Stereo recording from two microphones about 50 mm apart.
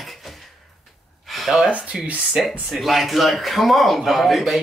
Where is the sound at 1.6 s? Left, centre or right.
Right.